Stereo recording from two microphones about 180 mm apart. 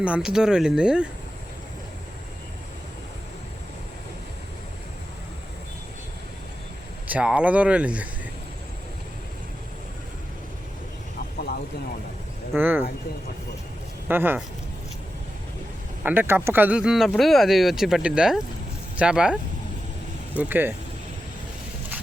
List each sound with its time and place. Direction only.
0.0 s speech: 5° right (ahead or behind)
7.1 s speech: 5° right (ahead or behind)
11.3 s a sound: 60° left (ahead or behind)
12.5 s speech: 10° right (ahead or behind)
14.1 s speech: 10° right (ahead or behind)
16.0 s speech: 10° right (ahead or behind)